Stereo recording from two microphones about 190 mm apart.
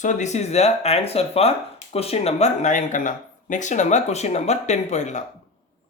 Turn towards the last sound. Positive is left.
turn(degrees=40)  # may be behind; listen again after turning